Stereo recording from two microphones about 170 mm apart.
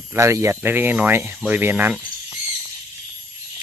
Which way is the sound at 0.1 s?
15° right (ahead or behind).